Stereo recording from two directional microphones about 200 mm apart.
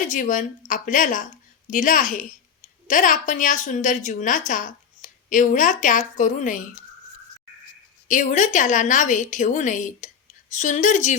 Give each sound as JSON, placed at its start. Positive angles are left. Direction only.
{"t": 0.1, "sound": "a woman's voice", "side_deg": 40}
{"t": 8.0, "sound": "a woman's voice", "side_deg": 40}